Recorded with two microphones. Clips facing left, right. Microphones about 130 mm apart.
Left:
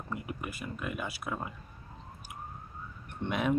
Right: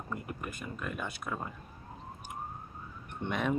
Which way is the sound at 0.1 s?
5° left (ahead or behind).